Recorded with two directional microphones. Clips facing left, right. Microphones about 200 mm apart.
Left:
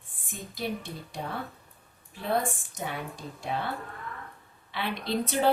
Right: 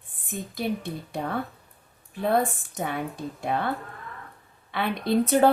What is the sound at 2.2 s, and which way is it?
A woman's voice, 55° right (ahead or behind).